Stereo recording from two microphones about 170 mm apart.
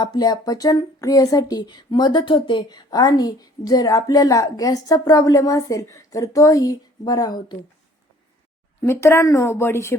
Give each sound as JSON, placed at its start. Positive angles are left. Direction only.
{"t": 0.0, "sound": "speech", "side_deg": 25}
{"t": 8.8, "sound": "speech", "side_deg": 15}